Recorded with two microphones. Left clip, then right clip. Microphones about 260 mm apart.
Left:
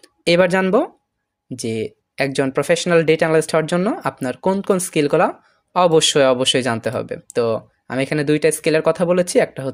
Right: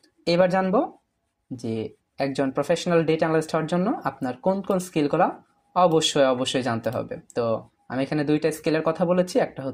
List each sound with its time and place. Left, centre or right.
0.0 s speech: left